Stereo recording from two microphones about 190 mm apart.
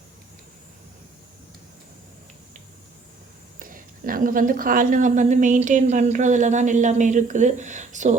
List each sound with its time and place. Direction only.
3.6 s a woman's voice: 45° right (ahead or behind)